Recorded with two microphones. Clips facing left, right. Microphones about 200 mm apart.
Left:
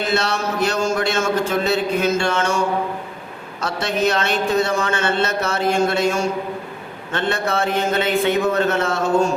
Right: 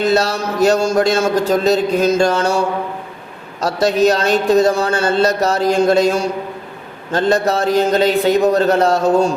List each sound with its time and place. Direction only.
0.0 s speech: 40° right (ahead or behind)